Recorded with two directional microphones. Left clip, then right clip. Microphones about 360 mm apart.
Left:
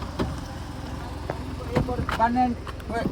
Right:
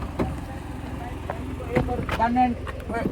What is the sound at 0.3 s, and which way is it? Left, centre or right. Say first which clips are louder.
Vehicle: right 1 dB; centre.